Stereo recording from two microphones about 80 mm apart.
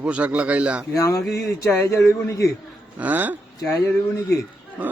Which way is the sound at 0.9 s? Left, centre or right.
Left.